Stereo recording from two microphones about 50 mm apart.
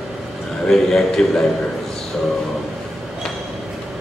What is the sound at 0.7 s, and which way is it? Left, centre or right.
Speech, centre.